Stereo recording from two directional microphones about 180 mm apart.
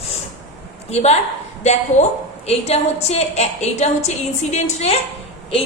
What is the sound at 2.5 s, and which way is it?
A woman's voice, 35° left (ahead or behind).